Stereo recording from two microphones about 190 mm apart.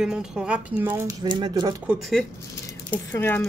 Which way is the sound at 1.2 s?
25° right (ahead or behind).